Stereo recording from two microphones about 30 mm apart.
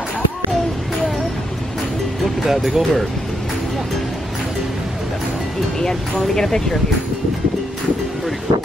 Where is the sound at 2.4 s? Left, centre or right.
Centre.